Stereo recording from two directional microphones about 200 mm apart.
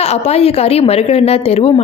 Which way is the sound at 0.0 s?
30° left (ahead or behind).